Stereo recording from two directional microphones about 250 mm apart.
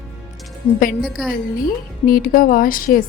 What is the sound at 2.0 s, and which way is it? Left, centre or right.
A woman's voice, left.